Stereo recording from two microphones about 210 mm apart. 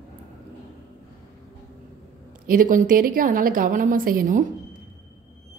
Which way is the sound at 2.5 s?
40° right (ahead or behind).